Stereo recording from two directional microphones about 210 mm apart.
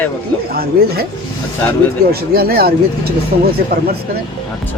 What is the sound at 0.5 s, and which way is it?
Speech, 45° right (ahead or behind).